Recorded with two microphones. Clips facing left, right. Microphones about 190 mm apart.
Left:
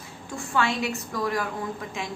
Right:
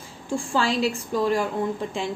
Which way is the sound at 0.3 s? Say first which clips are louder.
Right 3 dB; 30° right (ahead or behind).